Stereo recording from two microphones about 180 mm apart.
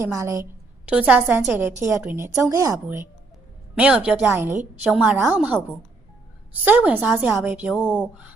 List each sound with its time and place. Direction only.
0.0 s a woman's voice: 15° right (ahead or behind)
0.9 s a woman's voice: 5° right (ahead or behind)